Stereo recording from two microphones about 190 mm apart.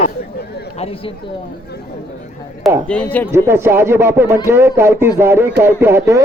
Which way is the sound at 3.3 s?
15° right (ahead or behind).